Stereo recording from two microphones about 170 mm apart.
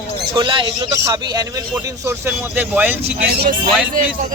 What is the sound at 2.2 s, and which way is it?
Speech, 10° right (ahead or behind).